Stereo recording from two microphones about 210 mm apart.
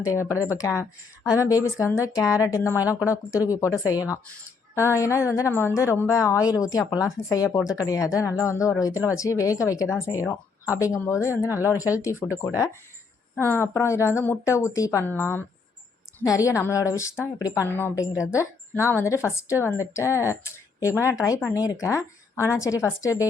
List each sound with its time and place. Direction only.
0.0 s speech: 15° left (ahead or behind)
13.4 s speech: 10° left (ahead or behind)